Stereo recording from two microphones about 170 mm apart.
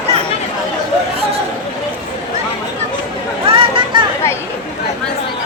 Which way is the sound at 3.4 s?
30° right (ahead or behind).